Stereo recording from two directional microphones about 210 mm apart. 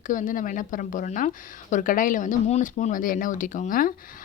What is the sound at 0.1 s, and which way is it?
Speech, 40° left (ahead or behind).